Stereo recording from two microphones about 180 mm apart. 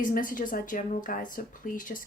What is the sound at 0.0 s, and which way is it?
A woman's voice, 50° left (ahead or behind).